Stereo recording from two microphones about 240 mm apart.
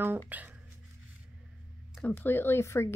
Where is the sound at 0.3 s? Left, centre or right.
Centre.